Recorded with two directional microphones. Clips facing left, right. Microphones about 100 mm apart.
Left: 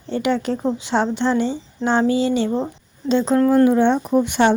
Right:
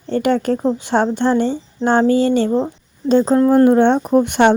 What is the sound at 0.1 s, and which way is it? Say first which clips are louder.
Speech: right 4 dB; 50° right (ahead or behind).